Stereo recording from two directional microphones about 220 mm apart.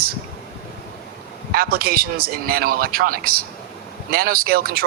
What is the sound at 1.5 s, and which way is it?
Speech, 45° right (ahead or behind).